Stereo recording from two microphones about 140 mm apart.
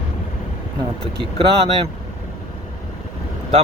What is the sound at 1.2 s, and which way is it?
Speech, 40° right (ahead or behind).